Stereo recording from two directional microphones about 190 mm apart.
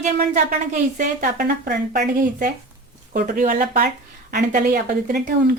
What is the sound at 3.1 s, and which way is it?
Speech, 50° right (ahead or behind).